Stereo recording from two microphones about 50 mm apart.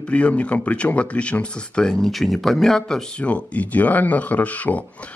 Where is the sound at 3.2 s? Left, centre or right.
Left.